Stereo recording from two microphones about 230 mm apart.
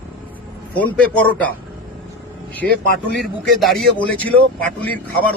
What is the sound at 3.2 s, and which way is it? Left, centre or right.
Speech, centre.